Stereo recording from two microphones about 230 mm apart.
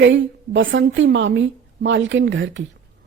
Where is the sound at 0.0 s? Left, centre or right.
Right.